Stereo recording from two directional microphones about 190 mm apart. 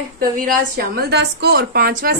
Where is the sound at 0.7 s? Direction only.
55° right (ahead or behind).